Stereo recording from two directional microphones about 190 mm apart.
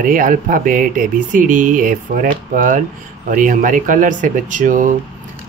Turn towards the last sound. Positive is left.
turn(degrees=-45)  # may be behind; listen again after turning